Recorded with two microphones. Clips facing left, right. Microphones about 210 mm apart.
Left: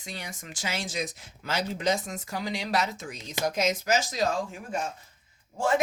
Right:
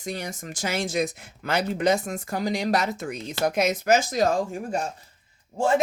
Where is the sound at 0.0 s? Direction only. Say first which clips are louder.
Right 8 dB; 45° right (ahead or behind).